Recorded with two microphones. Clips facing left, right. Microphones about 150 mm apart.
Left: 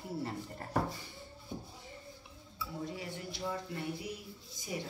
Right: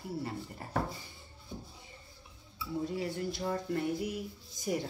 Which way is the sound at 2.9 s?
45° right (ahead or behind).